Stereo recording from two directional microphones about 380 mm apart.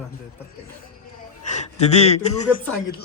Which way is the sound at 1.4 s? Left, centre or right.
Centre.